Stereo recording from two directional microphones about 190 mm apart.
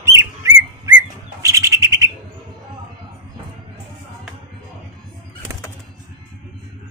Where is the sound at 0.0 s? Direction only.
15° right (ahead or behind).